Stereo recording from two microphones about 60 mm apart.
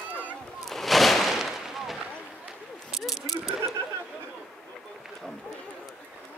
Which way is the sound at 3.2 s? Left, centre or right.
Left.